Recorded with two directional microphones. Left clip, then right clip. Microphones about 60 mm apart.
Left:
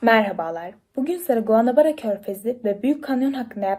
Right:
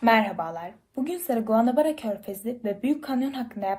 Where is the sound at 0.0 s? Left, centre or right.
Left.